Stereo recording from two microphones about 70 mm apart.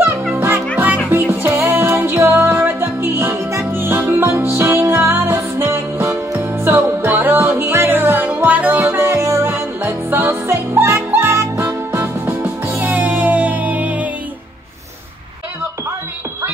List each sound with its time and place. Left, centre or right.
0.7 s music: right
8.8 s music: right
12.8 s music: right